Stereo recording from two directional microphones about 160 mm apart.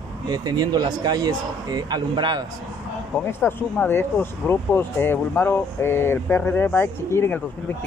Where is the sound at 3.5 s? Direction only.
15° left (ahead or behind).